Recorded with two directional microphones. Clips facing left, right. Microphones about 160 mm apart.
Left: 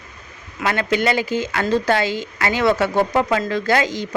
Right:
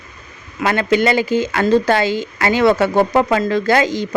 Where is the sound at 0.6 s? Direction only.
35° right (ahead or behind).